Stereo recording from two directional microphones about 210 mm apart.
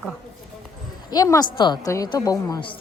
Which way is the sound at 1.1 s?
15° left (ahead or behind).